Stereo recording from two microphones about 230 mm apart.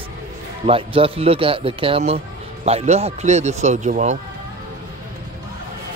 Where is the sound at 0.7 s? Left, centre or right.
Right.